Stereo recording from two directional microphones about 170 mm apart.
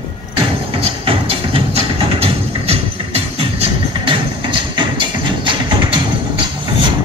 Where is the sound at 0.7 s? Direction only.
35° right (ahead or behind).